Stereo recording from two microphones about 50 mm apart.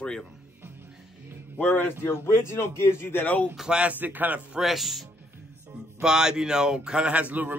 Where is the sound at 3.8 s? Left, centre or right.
Right.